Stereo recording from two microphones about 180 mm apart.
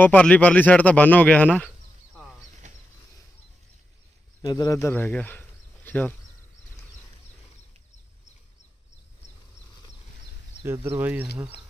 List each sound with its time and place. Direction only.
0.0 s a man's voice: 10° left (ahead or behind)
2.6 s a sound: 40° right (ahead or behind)
4.4 s a man's voice: 20° left (ahead or behind)
10.6 s speech: 15° right (ahead or behind)